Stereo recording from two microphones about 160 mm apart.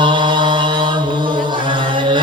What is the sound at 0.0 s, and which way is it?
Music, 30° right (ahead or behind).